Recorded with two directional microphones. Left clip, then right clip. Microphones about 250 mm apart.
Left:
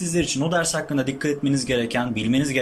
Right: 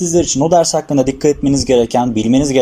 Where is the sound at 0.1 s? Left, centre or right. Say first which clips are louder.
Right 10 dB; right.